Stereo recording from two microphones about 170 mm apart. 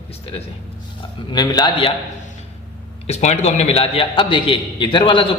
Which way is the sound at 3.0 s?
40° left (ahead or behind).